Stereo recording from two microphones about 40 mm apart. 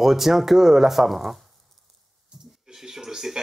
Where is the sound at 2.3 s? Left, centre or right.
Right.